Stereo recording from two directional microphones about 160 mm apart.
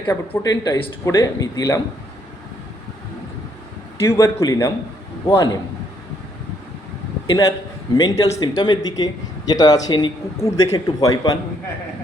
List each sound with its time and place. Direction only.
0.1 s a man's voice: 20° left (ahead or behind)
4.0 s a man's voice: 15° left (ahead or behind)
7.3 s a man's voice: 20° left (ahead or behind)